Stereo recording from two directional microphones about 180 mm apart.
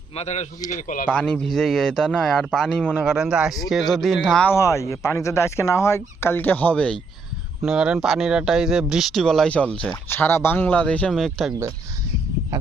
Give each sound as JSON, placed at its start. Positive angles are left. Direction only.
{"t": 0.2, "sound": "a man's voice", "side_deg": 40}
{"t": 1.1, "sound": "speech", "side_deg": 5}
{"t": 4.5, "sound": "speech", "side_deg": 15}